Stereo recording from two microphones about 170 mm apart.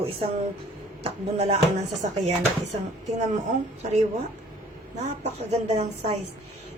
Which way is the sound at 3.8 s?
40° right (ahead or behind).